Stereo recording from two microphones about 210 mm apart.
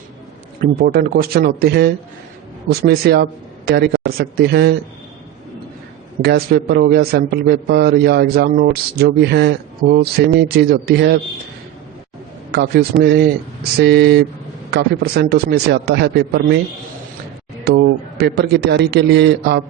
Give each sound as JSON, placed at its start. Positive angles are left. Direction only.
{"t": 0.6, "sound": "speech", "side_deg": -40}
{"t": 6.2, "sound": "speech", "side_deg": -50}
{"t": 12.5, "sound": "speech", "side_deg": -50}
{"t": 17.7, "sound": "speech", "side_deg": -50}